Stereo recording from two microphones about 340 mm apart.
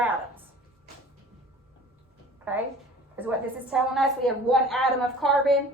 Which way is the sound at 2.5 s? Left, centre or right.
Centre.